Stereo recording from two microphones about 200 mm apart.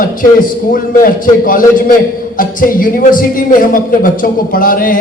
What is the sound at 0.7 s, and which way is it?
A man's voice, 45° left (ahead or behind).